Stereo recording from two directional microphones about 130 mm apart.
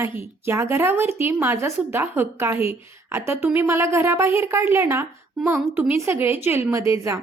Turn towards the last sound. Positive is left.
turn(degrees=-20)  # may be behind; listen again after turning